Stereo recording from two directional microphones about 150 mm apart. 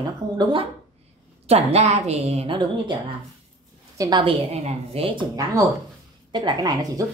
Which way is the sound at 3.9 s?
25° right (ahead or behind).